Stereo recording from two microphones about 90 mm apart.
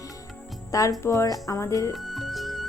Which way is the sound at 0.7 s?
40° left (ahead or behind).